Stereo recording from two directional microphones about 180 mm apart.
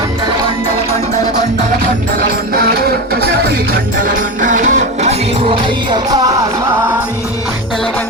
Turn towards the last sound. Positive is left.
turn(degrees=-20)  # may be behind; listen again after turning